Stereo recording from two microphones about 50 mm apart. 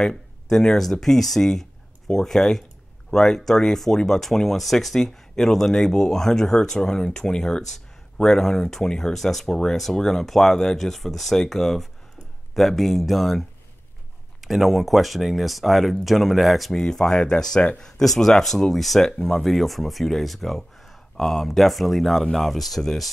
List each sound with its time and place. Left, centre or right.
0.0 s speech: centre
16.8 s speech: centre